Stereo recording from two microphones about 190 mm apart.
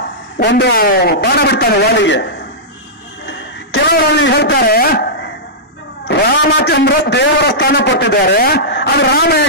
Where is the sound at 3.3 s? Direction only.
60° left (ahead or behind).